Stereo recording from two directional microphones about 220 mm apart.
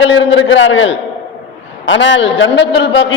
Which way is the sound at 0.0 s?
55° left (ahead or behind).